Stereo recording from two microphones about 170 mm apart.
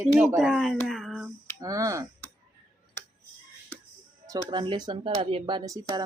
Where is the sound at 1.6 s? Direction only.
20° right (ahead or behind).